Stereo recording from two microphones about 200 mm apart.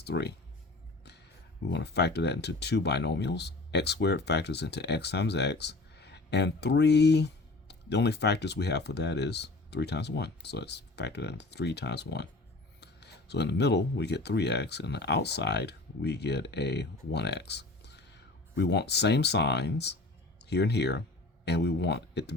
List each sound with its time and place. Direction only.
0.0 s speech: 55° left (ahead or behind)
1.6 s speech: 55° left (ahead or behind)